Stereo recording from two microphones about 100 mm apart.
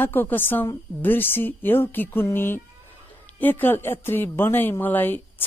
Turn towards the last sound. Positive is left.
turn(degrees=20)  # may be behind; listen again after turning